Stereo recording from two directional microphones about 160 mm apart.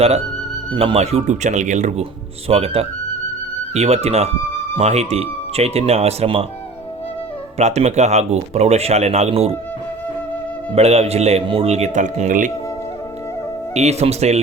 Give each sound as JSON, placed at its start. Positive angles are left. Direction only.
{"t": 0.7, "sound": "speech", "side_deg": -35}
{"t": 2.5, "sound": "speech", "side_deg": -40}
{"t": 7.6, "sound": "speech", "side_deg": -40}
{"t": 10.8, "sound": "speech", "side_deg": -40}
{"t": 13.7, "sound": "speech", "side_deg": -45}